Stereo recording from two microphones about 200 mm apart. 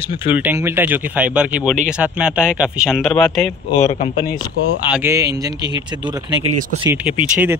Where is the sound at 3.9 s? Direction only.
30° left (ahead or behind).